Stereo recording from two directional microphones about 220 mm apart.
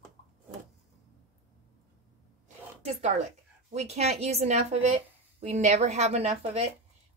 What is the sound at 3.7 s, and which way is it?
A woman's voice, 30° right (ahead or behind).